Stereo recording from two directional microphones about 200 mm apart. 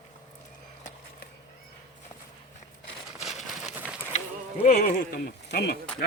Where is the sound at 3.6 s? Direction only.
5° right (ahead or behind).